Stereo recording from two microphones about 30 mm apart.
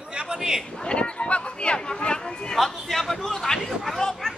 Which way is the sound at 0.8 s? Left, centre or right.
Left.